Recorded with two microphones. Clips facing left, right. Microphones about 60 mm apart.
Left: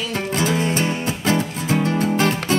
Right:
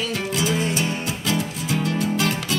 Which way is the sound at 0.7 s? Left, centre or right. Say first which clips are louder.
Left 3 dB; left.